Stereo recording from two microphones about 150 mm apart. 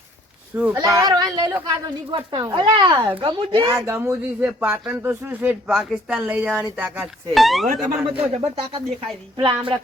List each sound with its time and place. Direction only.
0.5 s speech: 10° right (ahead or behind)
0.8 s speech: 25° right (ahead or behind)
3.7 s speech: 20° right (ahead or behind)
7.3 s speech: centre (ahead or behind)
8.2 s speech: 40° right (ahead or behind)